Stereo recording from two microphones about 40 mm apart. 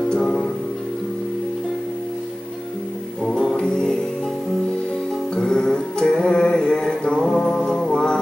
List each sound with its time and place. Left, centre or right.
0.2 s music: centre
3.5 s music: centre
5.3 s music: centre